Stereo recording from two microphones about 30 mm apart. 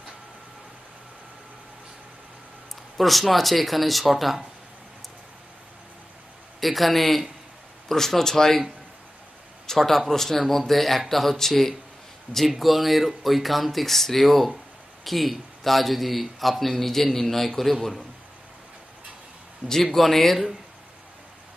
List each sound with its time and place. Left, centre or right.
3.0 s a man's voice: centre
6.6 s a man's voice: centre
7.9 s speech: centre
9.7 s a man's voice: centre
12.4 s a man's voice: centre
19.7 s speech: centre